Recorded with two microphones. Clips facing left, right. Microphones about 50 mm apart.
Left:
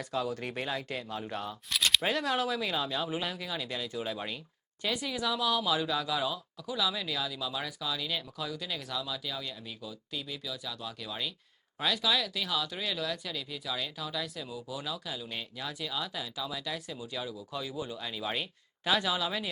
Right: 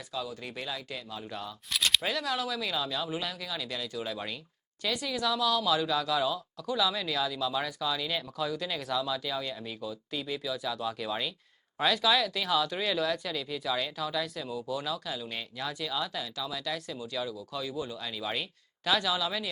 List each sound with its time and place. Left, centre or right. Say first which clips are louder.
0.1 s speech: left 3 dB; left
1.7 s a sound: even; centre
2.0 s speech: left 2 dB; left
2.6 s speech: even; left